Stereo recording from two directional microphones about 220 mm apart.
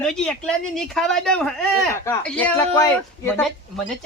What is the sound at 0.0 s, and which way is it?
Speech, 5° left (ahead or behind).